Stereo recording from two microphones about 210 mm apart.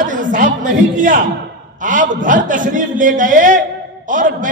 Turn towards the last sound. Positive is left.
turn(degrees=-40)  # may be behind; listen again after turning